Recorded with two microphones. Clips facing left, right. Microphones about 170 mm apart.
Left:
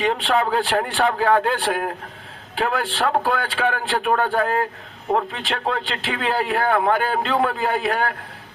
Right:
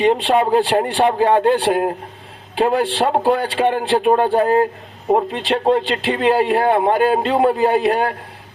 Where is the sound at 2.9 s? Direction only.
20° right (ahead or behind).